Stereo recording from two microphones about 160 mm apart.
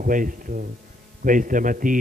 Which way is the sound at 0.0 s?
55° right (ahead or behind).